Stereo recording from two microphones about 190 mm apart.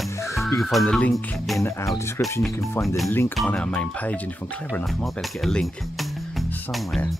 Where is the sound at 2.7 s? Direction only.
15° left (ahead or behind).